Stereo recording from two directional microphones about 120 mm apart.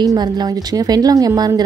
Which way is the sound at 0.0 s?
35° right (ahead or behind).